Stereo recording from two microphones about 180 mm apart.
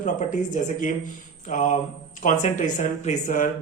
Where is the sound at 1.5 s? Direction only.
45° left (ahead or behind).